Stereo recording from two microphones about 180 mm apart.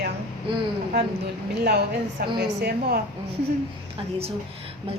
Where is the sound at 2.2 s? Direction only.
60° right (ahead or behind).